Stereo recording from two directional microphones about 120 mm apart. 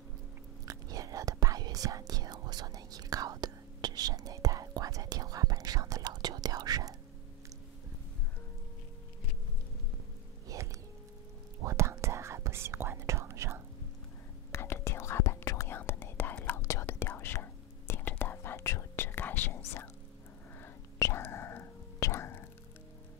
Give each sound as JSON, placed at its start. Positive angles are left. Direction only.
{"t": 0.7, "sound": "whispering", "side_deg": -30}
{"t": 10.5, "sound": "music", "side_deg": -30}
{"t": 11.6, "sound": "whispering", "side_deg": -25}
{"t": 14.5, "sound": "whispering", "side_deg": 20}